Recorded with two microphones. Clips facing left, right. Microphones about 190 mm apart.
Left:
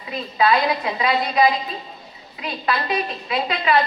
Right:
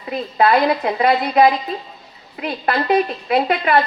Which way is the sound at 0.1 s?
55° right (ahead or behind).